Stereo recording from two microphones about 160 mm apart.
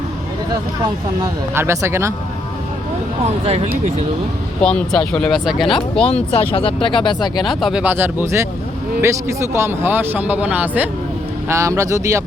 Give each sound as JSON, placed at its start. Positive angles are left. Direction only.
{"t": 1.2, "sound": "speech", "side_deg": -15}
{"t": 3.2, "sound": "speech", "side_deg": -40}
{"t": 4.6, "sound": "speech", "side_deg": 5}
{"t": 6.3, "sound": "speech", "side_deg": 35}
{"t": 7.4, "sound": "speech", "side_deg": -5}